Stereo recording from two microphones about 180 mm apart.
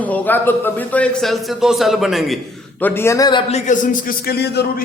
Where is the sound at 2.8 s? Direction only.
10° left (ahead or behind).